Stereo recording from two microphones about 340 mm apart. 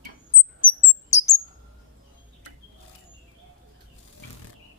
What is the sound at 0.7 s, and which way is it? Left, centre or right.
Bird, centre.